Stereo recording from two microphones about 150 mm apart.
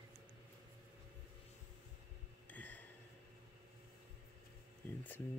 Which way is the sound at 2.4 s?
10° left (ahead or behind).